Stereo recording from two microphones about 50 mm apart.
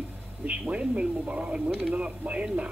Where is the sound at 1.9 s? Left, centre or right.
Right.